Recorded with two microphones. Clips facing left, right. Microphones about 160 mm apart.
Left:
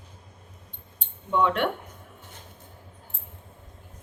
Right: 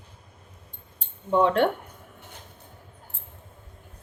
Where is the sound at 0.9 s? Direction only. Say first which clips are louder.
Right 3 dB; 35° right (ahead or behind).